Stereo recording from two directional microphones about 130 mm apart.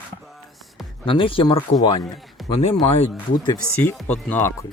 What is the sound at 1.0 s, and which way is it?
Speech, 40° left (ahead or behind).